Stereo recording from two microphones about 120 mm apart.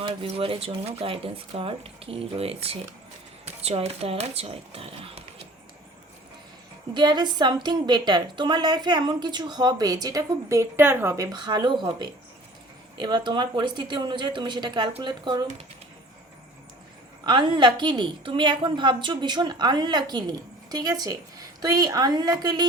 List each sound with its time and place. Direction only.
0.0 s speech: 50° right (ahead or behind)
6.9 s a woman's voice: 35° right (ahead or behind)
17.2 s a woman's voice: 40° right (ahead or behind)